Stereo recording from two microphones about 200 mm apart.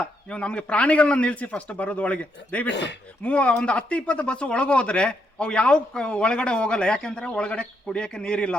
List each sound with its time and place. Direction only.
0.3 s a man's voice: 5° left (ahead or behind)
2.6 s speech: 60° left (ahead or behind)
3.2 s speech: 5° left (ahead or behind)